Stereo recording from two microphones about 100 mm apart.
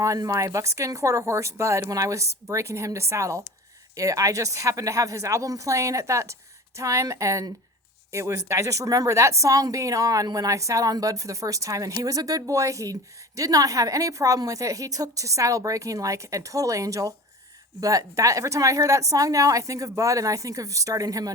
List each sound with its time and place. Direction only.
0.0 s speech: 30° right (ahead or behind)